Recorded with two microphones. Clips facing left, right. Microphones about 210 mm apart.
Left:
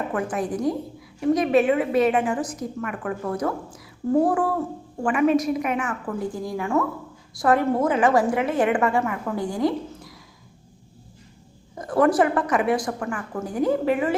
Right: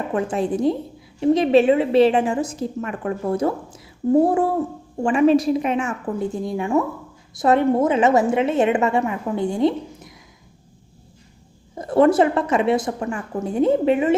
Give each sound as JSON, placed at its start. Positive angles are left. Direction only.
{"t": 0.1, "sound": "a woman's voice", "side_deg": -25}
{"t": 11.7, "sound": "a woman's voice", "side_deg": -25}